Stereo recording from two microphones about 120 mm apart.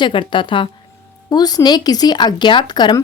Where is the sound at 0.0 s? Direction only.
40° left (ahead or behind).